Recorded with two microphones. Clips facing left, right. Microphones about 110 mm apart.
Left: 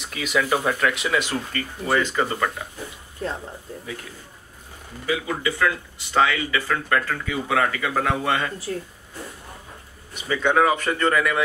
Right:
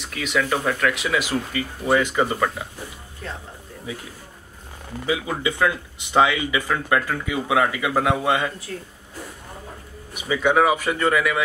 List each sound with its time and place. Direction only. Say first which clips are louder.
0.0 s speech: even; centre (ahead or behind)
5.0 s speech: right 1 dB; 20° right (ahead or behind)
10.1 s speech: right 1 dB; 10° right (ahead or behind)